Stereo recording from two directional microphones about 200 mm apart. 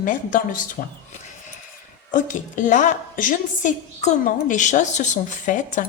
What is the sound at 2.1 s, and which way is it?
A woman's voice, 40° left (ahead or behind).